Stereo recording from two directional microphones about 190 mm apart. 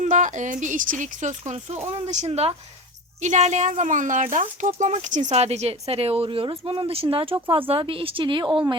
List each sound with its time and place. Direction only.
0.0 s a woman's voice: 40° right (ahead or behind); by 8.7 s 25° right (ahead or behind)